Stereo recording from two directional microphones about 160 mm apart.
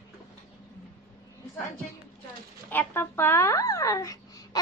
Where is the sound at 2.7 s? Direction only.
10° left (ahead or behind).